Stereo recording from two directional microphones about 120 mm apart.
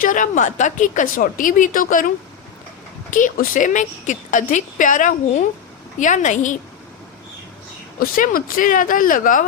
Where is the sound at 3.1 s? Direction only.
90° left.